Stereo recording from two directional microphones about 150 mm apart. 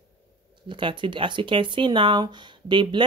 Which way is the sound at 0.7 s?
35° right (ahead or behind).